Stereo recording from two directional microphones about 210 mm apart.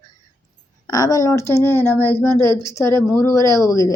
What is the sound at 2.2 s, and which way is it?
Speech, 20° right (ahead or behind).